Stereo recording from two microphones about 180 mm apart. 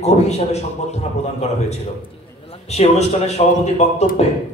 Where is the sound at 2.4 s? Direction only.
35° left (ahead or behind).